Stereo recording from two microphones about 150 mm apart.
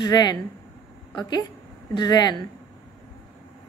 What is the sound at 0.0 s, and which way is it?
Speech, 25° left (ahead or behind).